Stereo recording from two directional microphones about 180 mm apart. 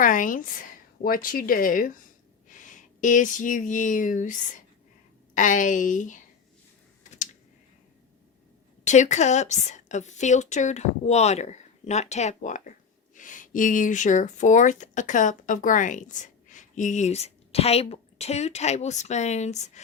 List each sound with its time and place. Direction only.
0.0 s speech: 45° left (ahead or behind)
3.0 s speech: 45° left (ahead or behind)
8.8 s a woman's voice: 40° left (ahead or behind)